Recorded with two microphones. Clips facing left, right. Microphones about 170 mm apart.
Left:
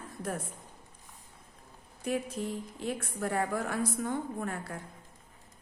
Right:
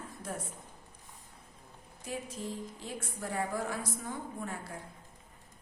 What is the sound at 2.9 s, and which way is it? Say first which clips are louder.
A woman's voice: left 7 dB; 60° left (ahead or behind).